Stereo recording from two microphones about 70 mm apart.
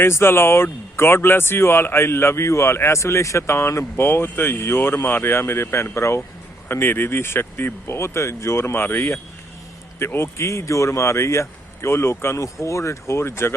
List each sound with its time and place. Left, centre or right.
0.0 s speech: left